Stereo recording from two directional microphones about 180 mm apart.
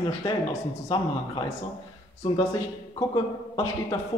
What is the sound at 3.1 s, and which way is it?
Speech, 25° left (ahead or behind).